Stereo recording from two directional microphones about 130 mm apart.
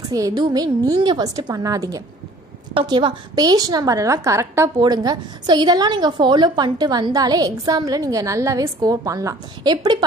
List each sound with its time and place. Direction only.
0.1 s a woman's voice: 30° right (ahead or behind)
2.7 s a woman's voice: 40° right (ahead or behind)